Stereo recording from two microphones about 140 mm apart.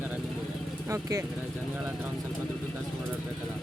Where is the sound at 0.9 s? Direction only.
20° right (ahead or behind).